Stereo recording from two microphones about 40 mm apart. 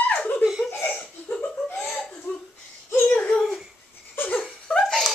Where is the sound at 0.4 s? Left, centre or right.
Centre.